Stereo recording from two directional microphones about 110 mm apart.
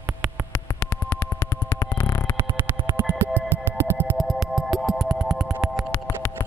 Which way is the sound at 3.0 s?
20° right (ahead or behind).